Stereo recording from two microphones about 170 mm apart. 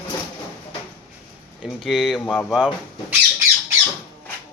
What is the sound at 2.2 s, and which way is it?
Speech, 10° left (ahead or behind).